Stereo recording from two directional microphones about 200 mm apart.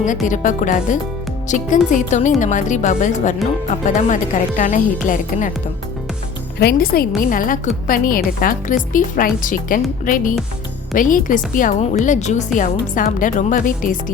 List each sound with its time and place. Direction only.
0.3 s a woman's voice: 40° left (ahead or behind)
6.6 s a woman's voice: 50° left (ahead or behind)